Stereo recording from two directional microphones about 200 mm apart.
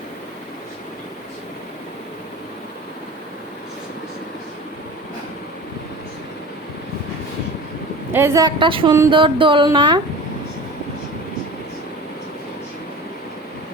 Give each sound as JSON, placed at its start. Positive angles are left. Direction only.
{"t": 8.1, "sound": "music", "side_deg": -15}